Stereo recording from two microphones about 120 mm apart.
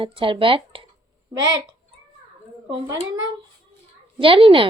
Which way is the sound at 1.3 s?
30° right (ahead or behind).